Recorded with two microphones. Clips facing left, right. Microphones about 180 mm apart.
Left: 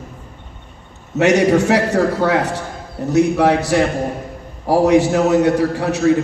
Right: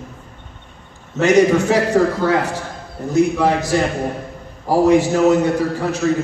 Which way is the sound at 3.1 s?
70° left (ahead or behind).